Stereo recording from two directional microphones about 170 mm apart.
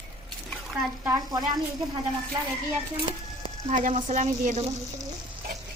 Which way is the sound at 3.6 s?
50° right (ahead or behind).